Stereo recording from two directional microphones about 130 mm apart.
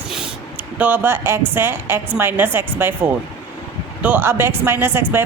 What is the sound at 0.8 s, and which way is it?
A woman's voice, 15° right (ahead or behind).